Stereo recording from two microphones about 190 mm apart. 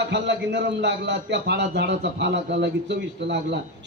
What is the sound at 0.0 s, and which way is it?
A man's voice, 65° right (ahead or behind).